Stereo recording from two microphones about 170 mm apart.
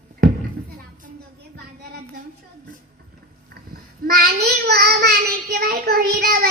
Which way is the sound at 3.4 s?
60° right (ahead or behind).